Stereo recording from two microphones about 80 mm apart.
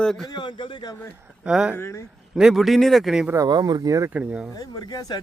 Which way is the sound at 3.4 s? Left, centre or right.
Right.